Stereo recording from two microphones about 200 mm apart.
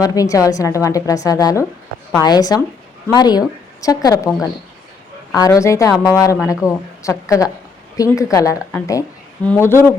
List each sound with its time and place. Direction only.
0.0 s a woman's voice: 15° left (ahead or behind)
5.3 s a woman's voice: 15° left (ahead or behind)